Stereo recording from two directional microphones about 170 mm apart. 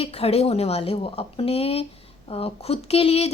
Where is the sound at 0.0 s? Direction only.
35° left (ahead or behind).